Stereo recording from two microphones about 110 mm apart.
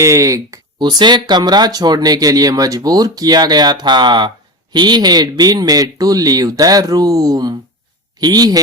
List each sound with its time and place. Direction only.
0.0 s speech: 30° right (ahead or behind)
0.8 s speech: 45° right (ahead or behind)